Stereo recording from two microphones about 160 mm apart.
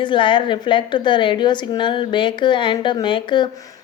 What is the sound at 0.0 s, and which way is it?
A woman's voice, 30° left (ahead or behind).